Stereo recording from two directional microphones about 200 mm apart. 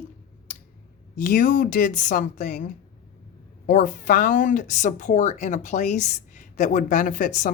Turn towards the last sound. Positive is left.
turn(degrees=40)  # may be behind; listen again after turning